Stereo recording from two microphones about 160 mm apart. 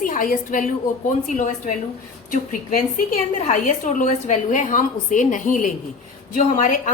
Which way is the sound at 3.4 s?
45° left (ahead or behind).